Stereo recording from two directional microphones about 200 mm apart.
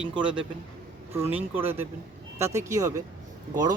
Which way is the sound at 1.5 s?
10° right (ahead or behind).